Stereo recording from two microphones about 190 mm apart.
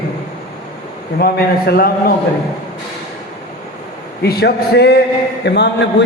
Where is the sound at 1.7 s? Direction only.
50° left (ahead or behind).